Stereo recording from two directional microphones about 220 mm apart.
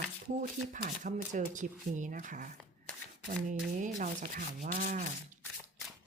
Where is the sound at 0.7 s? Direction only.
35° right (ahead or behind).